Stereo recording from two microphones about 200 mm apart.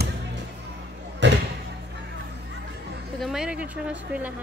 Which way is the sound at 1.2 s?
65° right (ahead or behind).